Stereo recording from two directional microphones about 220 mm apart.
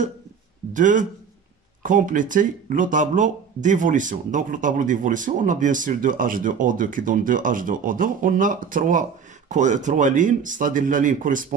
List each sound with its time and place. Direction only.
0.7 s speech: 35° right (ahead or behind)